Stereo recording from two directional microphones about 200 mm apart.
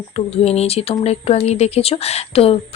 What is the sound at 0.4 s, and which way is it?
Speech, 30° left (ahead or behind).